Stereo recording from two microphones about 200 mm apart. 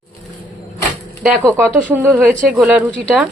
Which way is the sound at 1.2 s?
5° right (ahead or behind).